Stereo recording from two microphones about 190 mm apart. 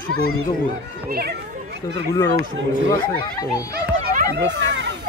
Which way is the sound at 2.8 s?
20° left (ahead or behind).